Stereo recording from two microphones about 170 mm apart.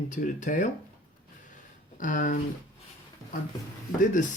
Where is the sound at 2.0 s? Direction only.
50° left (ahead or behind).